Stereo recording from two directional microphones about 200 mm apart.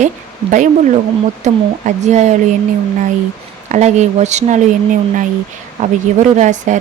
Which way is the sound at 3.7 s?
35° right (ahead or behind).